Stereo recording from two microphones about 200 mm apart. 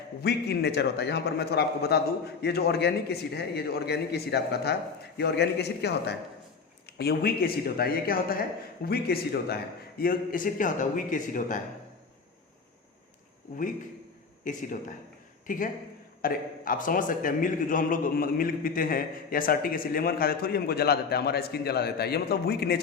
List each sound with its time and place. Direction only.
0.2 s a man's voice: 50° left (ahead or behind)
14.4 s a man's voice: 40° left (ahead or behind)